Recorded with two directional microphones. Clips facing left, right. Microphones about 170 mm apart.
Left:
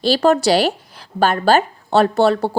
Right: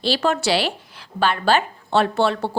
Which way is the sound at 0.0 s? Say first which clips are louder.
Left 6 dB; 40° left (ahead or behind).